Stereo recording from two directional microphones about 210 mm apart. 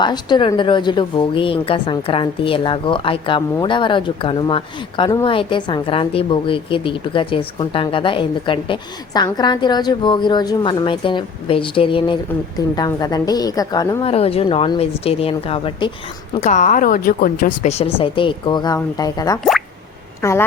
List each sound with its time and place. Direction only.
0.0 s a woman's voice: 20° left (ahead or behind)